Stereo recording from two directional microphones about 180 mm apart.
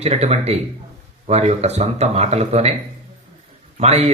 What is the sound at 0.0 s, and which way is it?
Speech, 35° right (ahead or behind).